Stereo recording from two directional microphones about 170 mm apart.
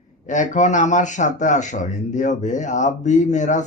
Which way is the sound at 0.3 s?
45° left (ahead or behind).